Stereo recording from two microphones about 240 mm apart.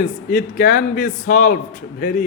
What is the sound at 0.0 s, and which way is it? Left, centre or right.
A man's voice, left.